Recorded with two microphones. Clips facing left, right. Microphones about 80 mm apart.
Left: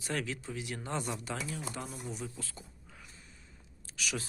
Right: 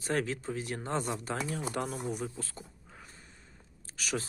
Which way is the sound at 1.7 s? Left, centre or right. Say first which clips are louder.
Right 7 dB; right.